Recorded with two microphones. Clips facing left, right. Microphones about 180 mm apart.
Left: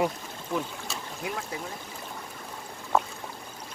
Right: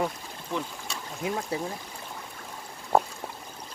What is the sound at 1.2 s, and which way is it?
Speech, 25° right (ahead or behind).